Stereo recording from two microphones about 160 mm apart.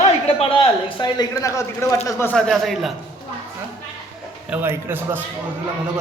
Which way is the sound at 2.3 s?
Centre (ahead or behind).